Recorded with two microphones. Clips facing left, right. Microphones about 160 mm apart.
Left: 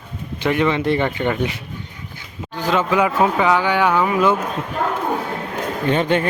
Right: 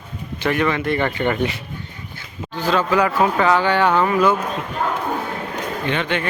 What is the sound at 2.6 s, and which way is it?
Speech, 15° left (ahead or behind).